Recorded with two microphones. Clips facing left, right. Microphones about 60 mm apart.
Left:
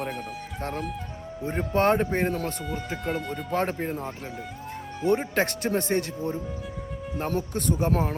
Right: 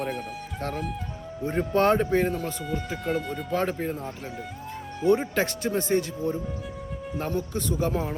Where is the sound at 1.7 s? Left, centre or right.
Left.